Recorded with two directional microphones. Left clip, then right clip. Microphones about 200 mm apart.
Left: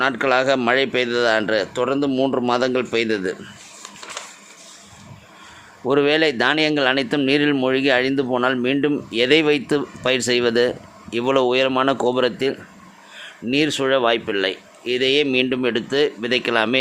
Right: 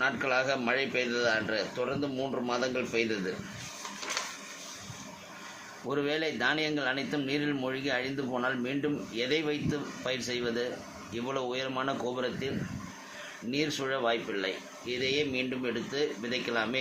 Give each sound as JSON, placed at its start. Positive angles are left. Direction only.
{"t": 0.0, "sound": "speech", "side_deg": 55}
{"t": 5.9, "sound": "speech", "side_deg": 50}
{"t": 13.5, "sound": "speech", "side_deg": 55}